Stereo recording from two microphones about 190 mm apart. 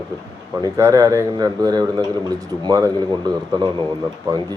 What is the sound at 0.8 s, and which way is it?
A man's voice, 15° right (ahead or behind).